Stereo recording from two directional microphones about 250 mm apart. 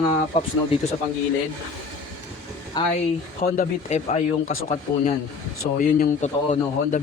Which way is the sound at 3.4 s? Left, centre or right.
Left.